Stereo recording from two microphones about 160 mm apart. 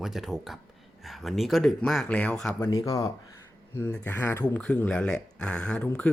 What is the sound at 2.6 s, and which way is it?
Speech, 20° left (ahead or behind).